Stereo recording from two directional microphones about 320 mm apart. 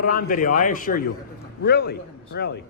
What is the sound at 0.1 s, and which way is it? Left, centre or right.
A man's voice, left.